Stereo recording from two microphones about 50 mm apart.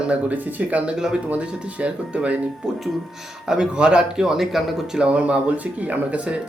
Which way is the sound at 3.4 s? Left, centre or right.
Centre.